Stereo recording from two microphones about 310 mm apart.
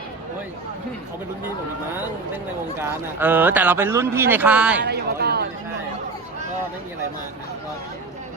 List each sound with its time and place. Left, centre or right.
2.8 s speech: centre
4.9 s speech: right